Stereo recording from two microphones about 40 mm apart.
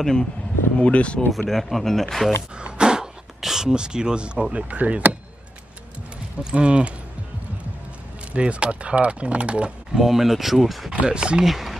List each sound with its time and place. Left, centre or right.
0.0 s speech: centre
0.7 s speech: left
1.4 s speech: centre
2.6 s a sound: centre
3.3 s speech: centre
3.6 s speech: right
6.4 s speech: right
8.3 s speech: right
9.9 s speech: centre
10.9 s speech: right
11.4 s speech: centre